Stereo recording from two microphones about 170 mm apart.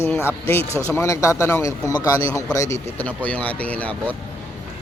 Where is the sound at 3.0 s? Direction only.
10° left (ahead or behind).